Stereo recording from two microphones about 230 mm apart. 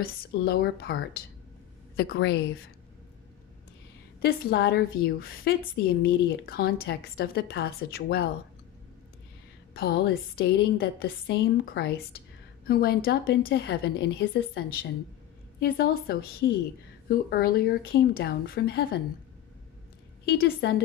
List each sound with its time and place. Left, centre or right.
0.0 s a woman's voice: left
4.2 s a woman's voice: left
9.8 s a woman's voice: left
20.2 s a woman's voice: left